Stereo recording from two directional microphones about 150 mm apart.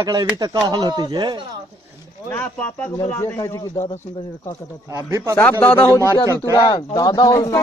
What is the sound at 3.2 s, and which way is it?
Speech, 20° left (ahead or behind).